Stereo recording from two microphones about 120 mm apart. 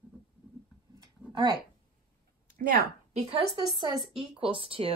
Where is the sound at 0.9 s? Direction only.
35° right (ahead or behind).